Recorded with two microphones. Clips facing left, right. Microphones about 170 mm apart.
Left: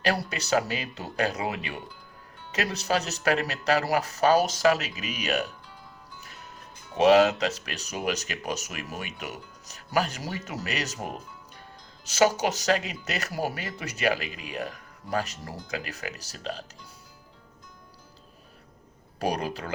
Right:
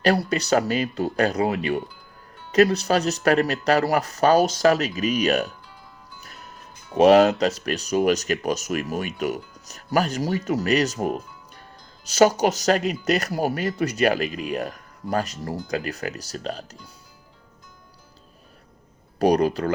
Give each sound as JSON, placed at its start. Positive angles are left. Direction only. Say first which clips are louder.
{"t": 0.1, "sound": "speech", "louder": "right 5 dB", "side_deg": -40}
{"t": 6.9, "sound": "speech", "louder": "right 4 dB", "side_deg": -40}
{"t": 19.3, "sound": "speech", "louder": "right 13 dB", "side_deg": -40}